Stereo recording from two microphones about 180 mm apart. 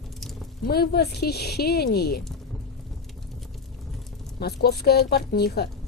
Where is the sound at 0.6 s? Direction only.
60° left (ahead or behind).